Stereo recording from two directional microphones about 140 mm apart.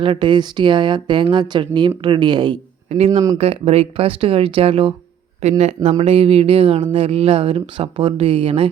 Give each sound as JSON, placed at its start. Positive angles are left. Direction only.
{"t": 0.0, "sound": "speech", "side_deg": -35}